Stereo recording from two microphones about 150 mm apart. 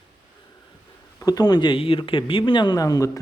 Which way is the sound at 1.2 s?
25° left (ahead or behind).